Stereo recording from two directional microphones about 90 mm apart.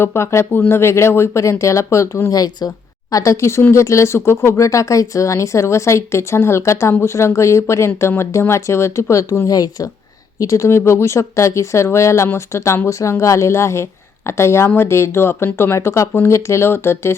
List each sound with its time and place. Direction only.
0.0 s speech: 30° left (ahead or behind)
2.3 s speech: 45° left (ahead or behind)
9.5 s speech: 40° left (ahead or behind)